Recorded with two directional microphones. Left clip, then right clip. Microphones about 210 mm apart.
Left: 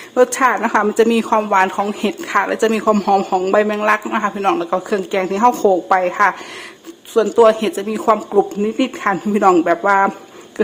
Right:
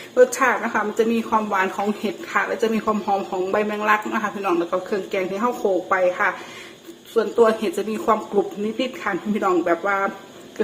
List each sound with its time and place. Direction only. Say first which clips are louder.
0.1 s speech: left 3 dB; 40° left (ahead or behind)